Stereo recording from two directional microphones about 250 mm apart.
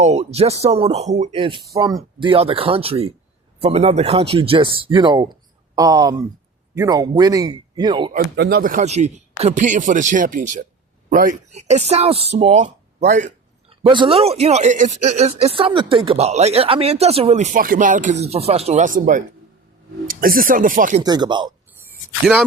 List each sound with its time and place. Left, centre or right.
0.0 s speech: right
8.4 s speech: right
21.0 s speech: centre